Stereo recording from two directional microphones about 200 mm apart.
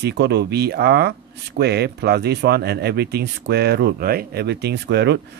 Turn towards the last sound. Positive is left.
turn(degrees=-60)  # may be behind; listen again after turning